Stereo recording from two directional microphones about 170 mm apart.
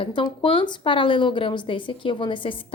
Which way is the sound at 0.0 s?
30° left (ahead or behind).